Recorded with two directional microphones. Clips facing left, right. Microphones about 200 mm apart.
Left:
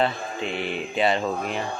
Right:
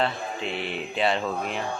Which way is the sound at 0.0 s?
Centre (ahead or behind).